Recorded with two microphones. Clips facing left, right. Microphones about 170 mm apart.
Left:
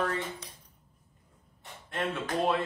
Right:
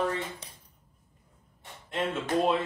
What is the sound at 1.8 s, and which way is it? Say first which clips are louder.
Speech: right 2 dB; 20° right (ahead or behind).